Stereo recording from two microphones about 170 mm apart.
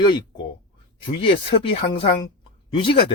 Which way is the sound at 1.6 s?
35° left (ahead or behind).